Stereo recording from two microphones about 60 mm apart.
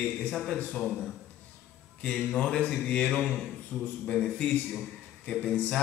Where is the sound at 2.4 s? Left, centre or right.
Centre.